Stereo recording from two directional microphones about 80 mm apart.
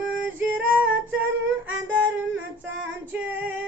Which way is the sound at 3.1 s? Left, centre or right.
Right.